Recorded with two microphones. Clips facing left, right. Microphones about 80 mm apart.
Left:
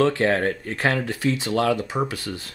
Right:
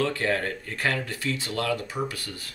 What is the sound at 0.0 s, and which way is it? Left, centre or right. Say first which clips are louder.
Speech: left 6 dB; left.